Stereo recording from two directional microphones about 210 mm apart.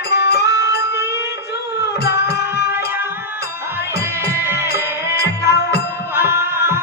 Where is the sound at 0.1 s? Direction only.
50° left (ahead or behind).